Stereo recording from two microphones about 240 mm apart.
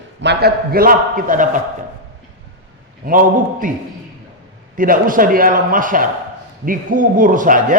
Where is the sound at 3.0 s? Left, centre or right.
Right.